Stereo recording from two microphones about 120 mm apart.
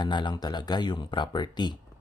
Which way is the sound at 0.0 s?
40° left (ahead or behind).